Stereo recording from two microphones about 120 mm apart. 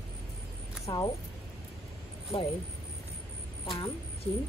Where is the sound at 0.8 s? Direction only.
30° left (ahead or behind).